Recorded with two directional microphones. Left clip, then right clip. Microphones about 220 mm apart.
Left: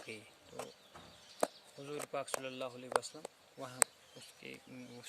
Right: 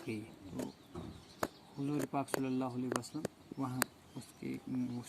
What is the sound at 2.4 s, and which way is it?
Speech, 35° left (ahead or behind).